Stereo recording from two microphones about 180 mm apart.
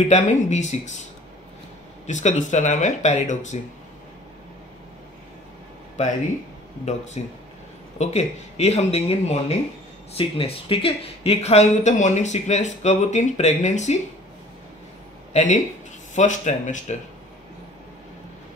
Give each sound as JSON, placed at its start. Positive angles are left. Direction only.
{"t": 0.1, "sound": "speech", "side_deg": 40}
{"t": 2.0, "sound": "speech", "side_deg": 40}
{"t": 7.2, "sound": "speech", "side_deg": 35}
{"t": 15.3, "sound": "speech", "side_deg": 40}